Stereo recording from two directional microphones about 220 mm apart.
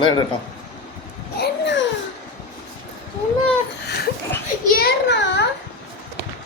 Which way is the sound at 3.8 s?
45° left (ahead or behind).